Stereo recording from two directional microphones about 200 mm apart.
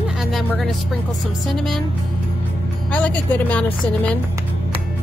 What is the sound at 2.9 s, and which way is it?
A woman's voice, 5° left (ahead or behind).